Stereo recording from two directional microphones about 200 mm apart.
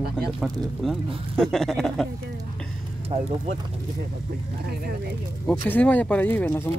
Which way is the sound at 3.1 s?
30° right (ahead or behind).